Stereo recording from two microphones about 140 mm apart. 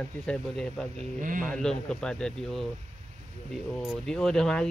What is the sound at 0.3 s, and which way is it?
Speech, 5° left (ahead or behind).